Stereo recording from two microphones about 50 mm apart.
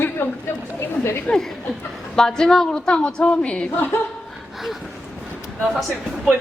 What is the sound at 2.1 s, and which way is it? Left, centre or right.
A woman's voice, centre.